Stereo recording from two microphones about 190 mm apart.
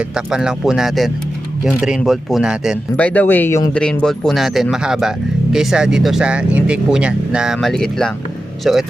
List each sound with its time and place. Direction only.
0.3 s speech: 5° right (ahead or behind)